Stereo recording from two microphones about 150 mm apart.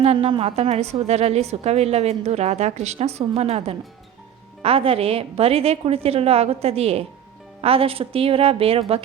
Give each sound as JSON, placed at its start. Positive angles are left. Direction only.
{"t": 0.0, "sound": "a woman's voice", "side_deg": -40}